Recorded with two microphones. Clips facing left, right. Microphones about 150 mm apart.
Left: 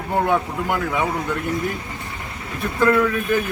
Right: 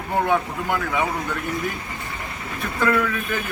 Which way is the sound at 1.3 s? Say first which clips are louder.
Left 3 dB; 25° left (ahead or behind).